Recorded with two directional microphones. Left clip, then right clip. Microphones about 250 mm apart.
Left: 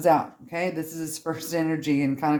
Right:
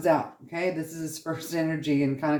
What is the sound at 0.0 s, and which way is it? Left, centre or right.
Speech, left.